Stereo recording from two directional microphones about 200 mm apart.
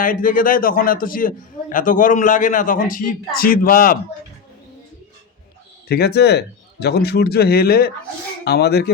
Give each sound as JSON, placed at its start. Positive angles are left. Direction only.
{"t": 0.0, "sound": "a man's voice", "side_deg": 45}
{"t": 5.9, "sound": "speech", "side_deg": 55}